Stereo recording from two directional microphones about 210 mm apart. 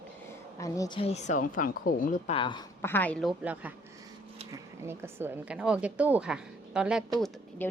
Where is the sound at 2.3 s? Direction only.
25° left (ahead or behind).